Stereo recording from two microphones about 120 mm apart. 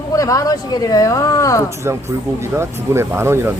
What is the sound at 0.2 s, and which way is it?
Speech, 25° left (ahead or behind).